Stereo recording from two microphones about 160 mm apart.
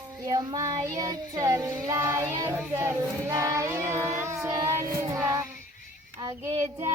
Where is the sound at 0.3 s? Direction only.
25° right (ahead or behind).